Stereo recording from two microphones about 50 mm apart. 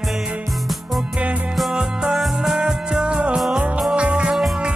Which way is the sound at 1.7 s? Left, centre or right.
Centre.